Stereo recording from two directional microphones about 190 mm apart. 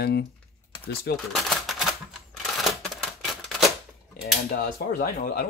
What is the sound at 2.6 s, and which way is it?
Typewriter, centre (ahead or behind).